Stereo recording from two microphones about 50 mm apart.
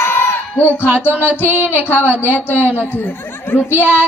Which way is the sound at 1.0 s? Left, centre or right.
Left.